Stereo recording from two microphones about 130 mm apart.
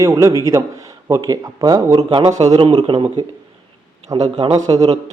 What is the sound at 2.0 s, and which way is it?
Speech, 40° right (ahead or behind).